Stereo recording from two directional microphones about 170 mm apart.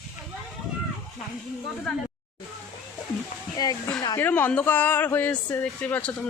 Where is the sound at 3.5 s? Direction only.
20° left (ahead or behind).